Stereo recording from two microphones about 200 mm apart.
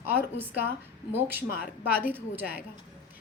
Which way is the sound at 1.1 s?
10° right (ahead or behind).